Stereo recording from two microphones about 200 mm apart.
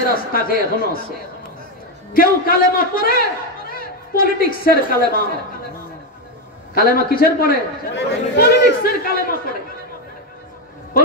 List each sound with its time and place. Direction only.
0.1 s a man's voice: 45° left (ahead or behind)
2.1 s a man's voice: 45° left (ahead or behind)
6.7 s a man's voice: 50° left (ahead or behind)